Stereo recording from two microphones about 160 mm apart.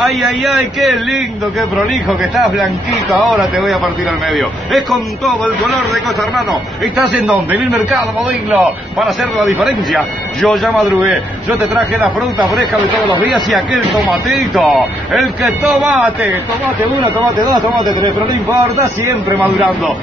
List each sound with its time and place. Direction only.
0.0 s speech: centre (ahead or behind)
7.0 s speech: centre (ahead or behind)
13.5 s speech: centre (ahead or behind)
17.5 s a man's voice: 25° right (ahead or behind)